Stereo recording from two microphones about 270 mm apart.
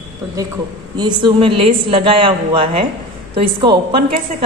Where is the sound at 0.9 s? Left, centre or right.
Centre.